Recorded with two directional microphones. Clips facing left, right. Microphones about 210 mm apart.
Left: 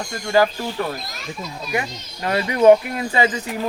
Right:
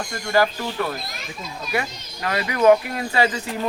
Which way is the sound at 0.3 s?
15° left (ahead or behind).